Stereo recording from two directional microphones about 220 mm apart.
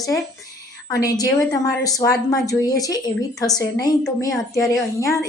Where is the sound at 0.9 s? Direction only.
15° left (ahead or behind).